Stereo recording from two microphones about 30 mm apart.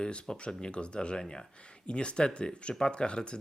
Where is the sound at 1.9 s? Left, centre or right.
Left.